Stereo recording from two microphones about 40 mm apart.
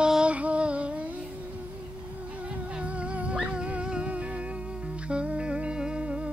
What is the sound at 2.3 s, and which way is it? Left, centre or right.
Dog, right.